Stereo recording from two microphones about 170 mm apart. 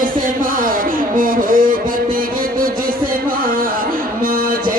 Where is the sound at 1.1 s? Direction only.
55° right (ahead or behind).